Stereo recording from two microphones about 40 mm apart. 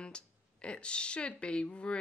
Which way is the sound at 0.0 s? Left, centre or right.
Left.